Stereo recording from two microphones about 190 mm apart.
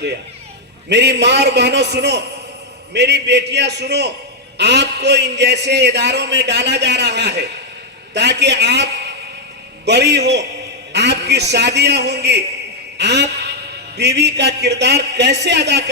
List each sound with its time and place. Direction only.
0.9 s a man's voice: 65° right (ahead or behind)
13.0 s a sound: 65° right (ahead or behind)
13.9 s a man's voice: 60° right (ahead or behind)